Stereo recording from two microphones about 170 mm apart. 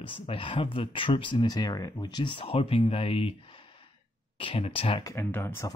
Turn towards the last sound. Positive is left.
turn(degrees=15)  # may be behind; listen again after turning